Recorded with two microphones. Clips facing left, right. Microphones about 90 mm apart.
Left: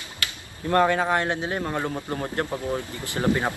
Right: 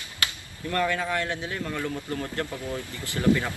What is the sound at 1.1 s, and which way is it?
Speech, 25° left (ahead or behind).